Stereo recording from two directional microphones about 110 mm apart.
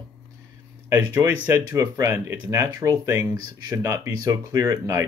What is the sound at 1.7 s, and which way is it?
Speech, 30° right (ahead or behind).